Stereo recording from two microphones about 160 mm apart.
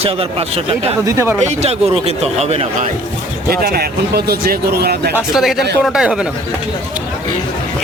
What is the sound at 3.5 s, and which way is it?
Speech, 70° right (ahead or behind).